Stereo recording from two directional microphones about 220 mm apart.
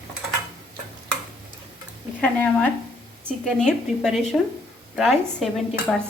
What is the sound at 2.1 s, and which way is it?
Speech, 5° left (ahead or behind).